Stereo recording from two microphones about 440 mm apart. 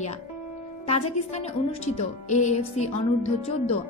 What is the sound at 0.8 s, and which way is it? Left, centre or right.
Speech, centre.